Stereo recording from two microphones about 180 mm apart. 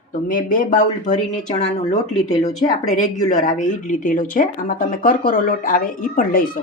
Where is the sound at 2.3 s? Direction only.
20° left (ahead or behind).